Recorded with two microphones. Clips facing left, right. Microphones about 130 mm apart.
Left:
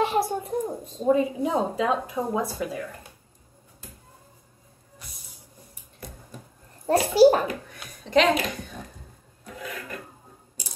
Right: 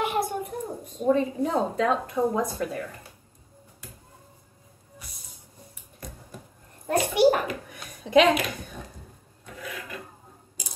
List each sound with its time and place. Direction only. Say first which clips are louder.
0.0 s a sound: left 3 dB; 25° left (ahead or behind)
1.1 s speech: left 2 dB; 10° left (ahead or behind)
6.9 s a child's voice: left 4 dB; 30° left (ahead or behind)
8.0 s speech: right 2 dB; 10° right (ahead or behind)